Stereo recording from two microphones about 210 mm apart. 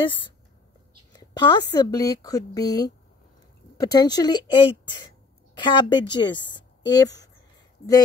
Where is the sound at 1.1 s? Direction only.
20° left (ahead or behind).